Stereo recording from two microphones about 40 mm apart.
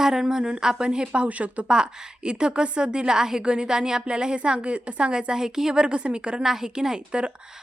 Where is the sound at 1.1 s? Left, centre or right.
Right.